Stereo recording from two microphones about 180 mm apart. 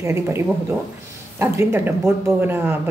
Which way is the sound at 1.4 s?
15° right (ahead or behind).